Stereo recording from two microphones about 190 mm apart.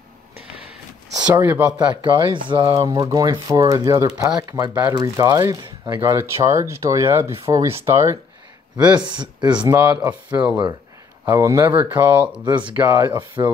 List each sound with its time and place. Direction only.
1.2 s speech: 15° right (ahead or behind)
9.8 s speech: 10° right (ahead or behind)